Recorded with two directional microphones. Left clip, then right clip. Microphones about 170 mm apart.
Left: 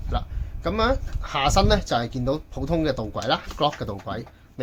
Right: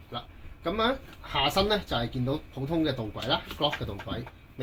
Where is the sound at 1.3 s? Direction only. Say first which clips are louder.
Left 5 dB; 45° left (ahead or behind).